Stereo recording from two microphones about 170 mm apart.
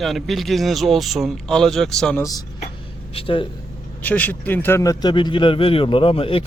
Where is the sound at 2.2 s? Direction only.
20° left (ahead or behind).